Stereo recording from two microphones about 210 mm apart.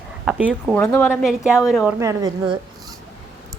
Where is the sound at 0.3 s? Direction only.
5° right (ahead or behind).